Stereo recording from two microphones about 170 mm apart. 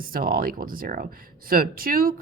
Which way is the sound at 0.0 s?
55° right (ahead or behind).